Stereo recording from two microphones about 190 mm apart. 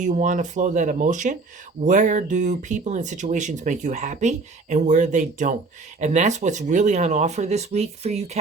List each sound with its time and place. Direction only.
0.0 s speech: 40° right (ahead or behind)